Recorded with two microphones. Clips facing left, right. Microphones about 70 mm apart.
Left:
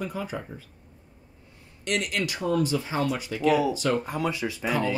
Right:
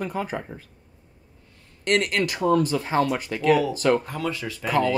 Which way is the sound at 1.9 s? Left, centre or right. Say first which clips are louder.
Right 5 dB; right.